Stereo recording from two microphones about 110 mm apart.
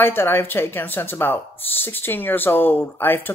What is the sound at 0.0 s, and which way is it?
Speech, 20° left (ahead or behind).